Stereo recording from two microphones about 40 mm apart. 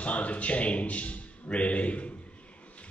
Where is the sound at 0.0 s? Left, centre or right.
Left.